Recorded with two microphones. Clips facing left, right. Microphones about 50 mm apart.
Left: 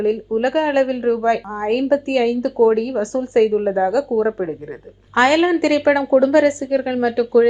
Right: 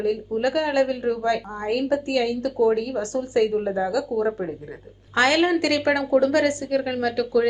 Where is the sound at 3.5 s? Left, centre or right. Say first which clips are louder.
Left 6 dB; left.